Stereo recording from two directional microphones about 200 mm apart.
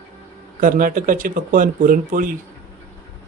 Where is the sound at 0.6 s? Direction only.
45° right (ahead or behind).